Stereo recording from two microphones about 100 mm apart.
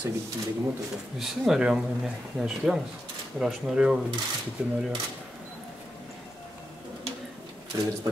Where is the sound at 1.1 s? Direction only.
5° right (ahead or behind).